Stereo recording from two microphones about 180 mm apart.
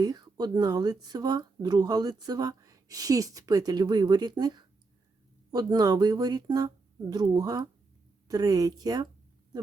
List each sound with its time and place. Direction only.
0.0 s speech: 20° right (ahead or behind)